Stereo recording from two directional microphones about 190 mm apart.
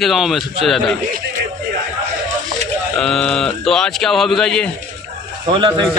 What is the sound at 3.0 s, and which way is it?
A man's voice, 5° left (ahead or behind).